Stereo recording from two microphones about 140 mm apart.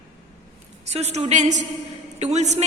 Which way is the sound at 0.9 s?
55° right (ahead or behind).